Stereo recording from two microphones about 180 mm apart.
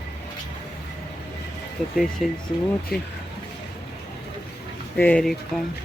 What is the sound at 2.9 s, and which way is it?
Speech, 60° left (ahead or behind).